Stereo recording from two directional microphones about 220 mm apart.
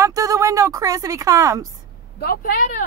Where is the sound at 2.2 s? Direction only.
40° left (ahead or behind).